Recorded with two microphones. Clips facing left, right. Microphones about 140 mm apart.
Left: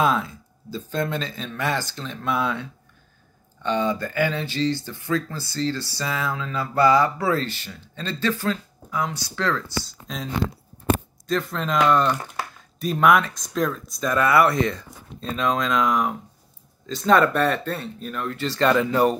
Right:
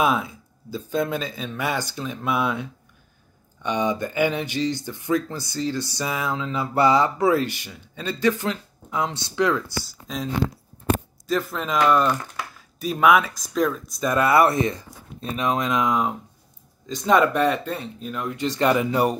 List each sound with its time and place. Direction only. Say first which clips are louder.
0.0 s speech: even; 10° right (ahead or behind)
9.4 s speech: right 4 dB; 15° right (ahead or behind)
11.2 s speech: even; 5° right (ahead or behind)
14.1 s speech: even; 25° right (ahead or behind)